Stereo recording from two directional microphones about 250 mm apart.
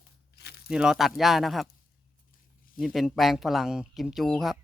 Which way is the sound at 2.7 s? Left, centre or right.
Centre.